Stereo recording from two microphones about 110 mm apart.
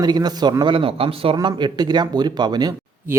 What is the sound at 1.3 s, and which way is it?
Speech, 40° right (ahead or behind).